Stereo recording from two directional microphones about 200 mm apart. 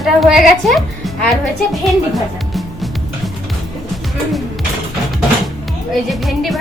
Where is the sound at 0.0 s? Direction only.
Centre (ahead or behind).